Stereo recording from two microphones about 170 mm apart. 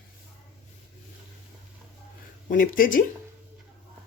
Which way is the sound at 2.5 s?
55° left (ahead or behind).